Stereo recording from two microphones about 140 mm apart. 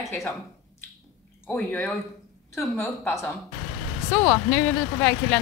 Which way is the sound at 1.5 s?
10° left (ahead or behind).